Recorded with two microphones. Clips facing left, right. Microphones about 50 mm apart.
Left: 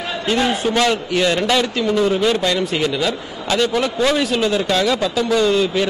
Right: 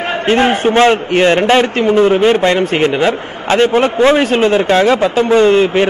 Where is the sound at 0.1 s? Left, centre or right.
Right.